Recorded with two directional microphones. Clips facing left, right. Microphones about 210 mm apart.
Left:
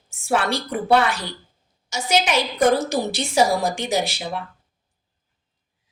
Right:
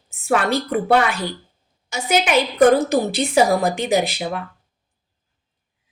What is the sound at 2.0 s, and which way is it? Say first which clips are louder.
A woman's voice: right 3 dB; 55° right (ahead or behind).